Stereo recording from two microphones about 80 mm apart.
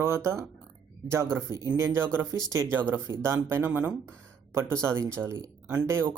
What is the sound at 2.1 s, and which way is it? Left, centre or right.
Speech, right.